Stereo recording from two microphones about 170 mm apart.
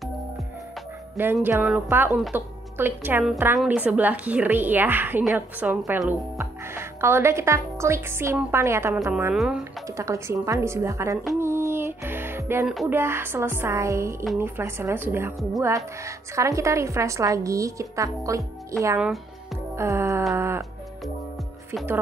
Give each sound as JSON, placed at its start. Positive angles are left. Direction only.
{"t": 1.1, "sound": "a woman's voice", "side_deg": -10}
{"t": 9.8, "sound": "a woman's voice", "side_deg": -15}
{"t": 11.3, "sound": "music", "side_deg": -15}
{"t": 12.9, "sound": "a woman's voice", "side_deg": -15}
{"t": 18.9, "sound": "music", "side_deg": -5}
{"t": 19.7, "sound": "a woman's voice", "side_deg": -15}
{"t": 20.3, "sound": "music", "side_deg": -15}